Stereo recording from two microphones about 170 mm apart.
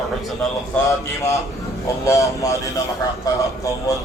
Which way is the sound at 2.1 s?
20° left (ahead or behind).